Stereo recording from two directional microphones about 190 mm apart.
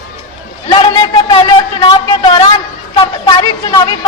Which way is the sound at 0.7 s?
25° left (ahead or behind).